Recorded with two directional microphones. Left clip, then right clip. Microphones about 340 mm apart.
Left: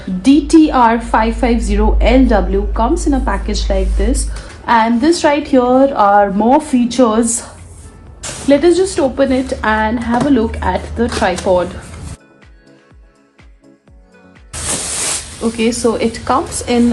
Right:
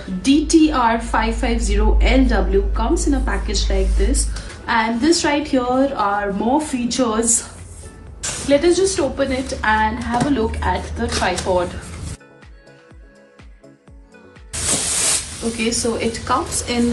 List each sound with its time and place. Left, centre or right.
0.3 s a woman's voice: centre
8.4 s speech: left
15.8 s speech: centre